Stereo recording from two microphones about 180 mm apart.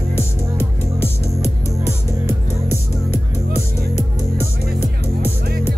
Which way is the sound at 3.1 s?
35° left (ahead or behind).